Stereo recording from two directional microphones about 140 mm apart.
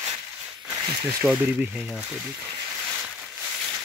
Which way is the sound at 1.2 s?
15° right (ahead or behind).